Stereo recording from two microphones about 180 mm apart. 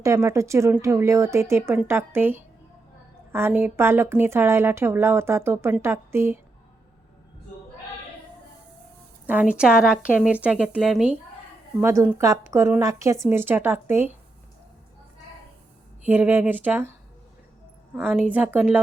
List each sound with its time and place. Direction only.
0.0 s a woman's voice: 15° right (ahead or behind)
9.2 s a woman's voice: 10° right (ahead or behind)
16.0 s a woman's voice: 10° right (ahead or behind)
18.0 s a woman's voice: 5° right (ahead or behind)